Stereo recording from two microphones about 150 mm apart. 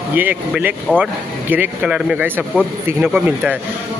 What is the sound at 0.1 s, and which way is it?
Speech, 10° right (ahead or behind).